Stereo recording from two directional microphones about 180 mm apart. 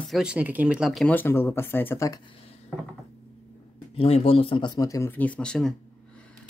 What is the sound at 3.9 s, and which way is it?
Speech, 30° left (ahead or behind).